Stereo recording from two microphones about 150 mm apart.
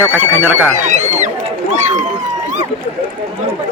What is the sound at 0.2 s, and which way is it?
Speech, 10° right (ahead or behind).